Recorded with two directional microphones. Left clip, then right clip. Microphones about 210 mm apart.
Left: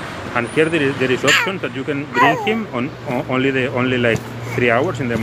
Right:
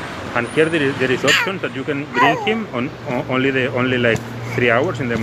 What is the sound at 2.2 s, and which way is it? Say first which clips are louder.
Speech: left 1 dB; 20° left (ahead or behind).